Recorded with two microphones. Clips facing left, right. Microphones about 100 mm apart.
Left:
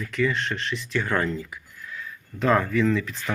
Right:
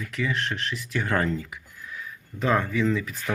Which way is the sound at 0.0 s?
5° right (ahead or behind).